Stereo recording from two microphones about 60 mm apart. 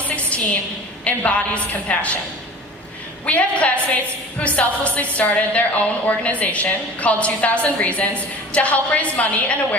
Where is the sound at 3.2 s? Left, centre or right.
Left.